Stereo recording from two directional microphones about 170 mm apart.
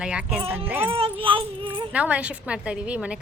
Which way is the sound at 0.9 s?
35° right (ahead or behind).